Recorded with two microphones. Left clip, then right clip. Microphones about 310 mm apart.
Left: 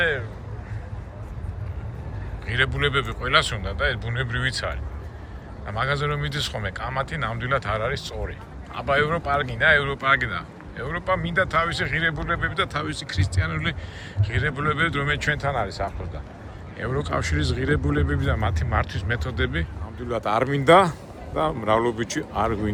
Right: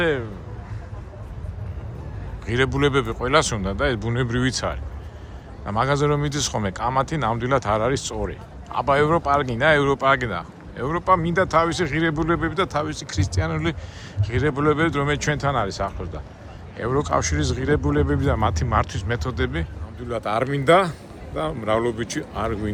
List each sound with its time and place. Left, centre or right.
0.0 s a sound: centre
2.5 s speech: centre
20.1 s speech: centre